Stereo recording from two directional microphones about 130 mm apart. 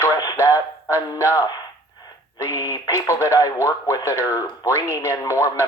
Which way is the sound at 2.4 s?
25° left (ahead or behind).